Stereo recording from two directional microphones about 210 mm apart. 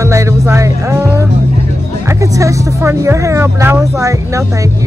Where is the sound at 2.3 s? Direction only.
15° right (ahead or behind).